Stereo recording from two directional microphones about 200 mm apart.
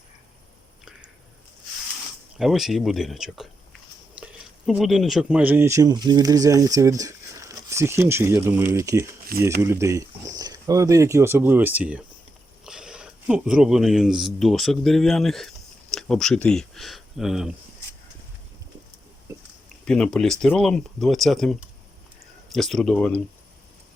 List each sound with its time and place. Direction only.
2.4 s speech: centre (ahead or behind)
19.8 s speech: 5° left (ahead or behind)